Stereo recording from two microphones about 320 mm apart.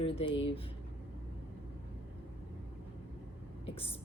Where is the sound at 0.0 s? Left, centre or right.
Centre.